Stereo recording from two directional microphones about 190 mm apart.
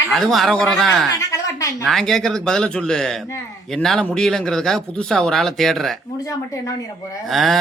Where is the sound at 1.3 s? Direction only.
15° left (ahead or behind).